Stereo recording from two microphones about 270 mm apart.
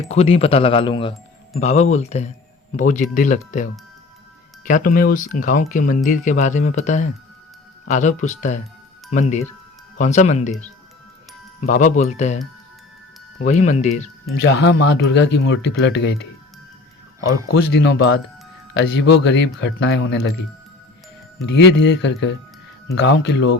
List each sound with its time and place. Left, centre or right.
0.1 s speech: left
11.6 s speech: left
13.4 s speech: left
14.3 s speech: left
17.5 s speech: left
21.3 s speech: left